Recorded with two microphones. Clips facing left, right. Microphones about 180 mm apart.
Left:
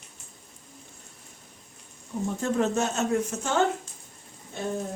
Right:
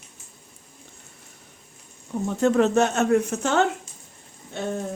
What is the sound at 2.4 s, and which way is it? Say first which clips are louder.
Speech: right 7 dB; 70° right (ahead or behind).